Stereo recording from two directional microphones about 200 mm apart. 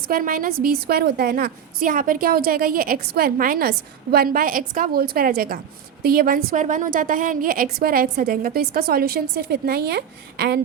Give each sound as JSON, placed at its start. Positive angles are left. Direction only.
{"t": 0.1, "sound": "a woman's voice", "side_deg": -45}